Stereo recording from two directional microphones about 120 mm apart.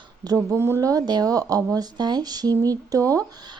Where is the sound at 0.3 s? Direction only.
25° right (ahead or behind).